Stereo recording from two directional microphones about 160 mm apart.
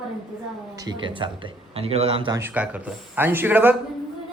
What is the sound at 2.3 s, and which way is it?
A man's voice, 10° right (ahead or behind).